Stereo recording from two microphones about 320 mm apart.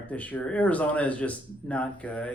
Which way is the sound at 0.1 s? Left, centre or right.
Centre.